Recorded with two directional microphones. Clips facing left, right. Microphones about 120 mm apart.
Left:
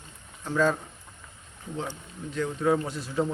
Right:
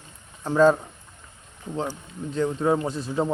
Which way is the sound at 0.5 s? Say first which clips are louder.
Right 7 dB; 30° right (ahead or behind).